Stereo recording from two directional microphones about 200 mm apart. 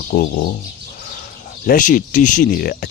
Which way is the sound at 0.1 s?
45° left (ahead or behind).